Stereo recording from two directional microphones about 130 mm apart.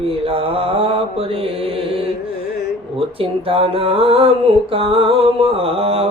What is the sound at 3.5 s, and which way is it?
Mantra, 45° right (ahead or behind).